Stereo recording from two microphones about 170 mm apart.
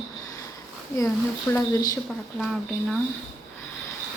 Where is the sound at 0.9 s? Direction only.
15° left (ahead or behind).